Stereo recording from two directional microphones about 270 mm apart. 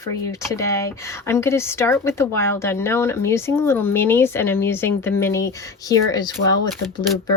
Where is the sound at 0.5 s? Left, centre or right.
Centre.